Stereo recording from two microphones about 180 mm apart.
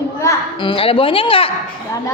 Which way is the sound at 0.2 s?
15° left (ahead or behind).